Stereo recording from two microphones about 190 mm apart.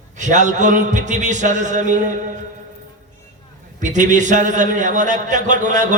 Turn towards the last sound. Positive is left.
turn(degrees=-40)  # may be behind; listen again after turning